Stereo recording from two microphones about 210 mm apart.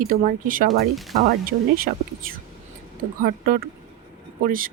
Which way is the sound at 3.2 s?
45° right (ahead or behind).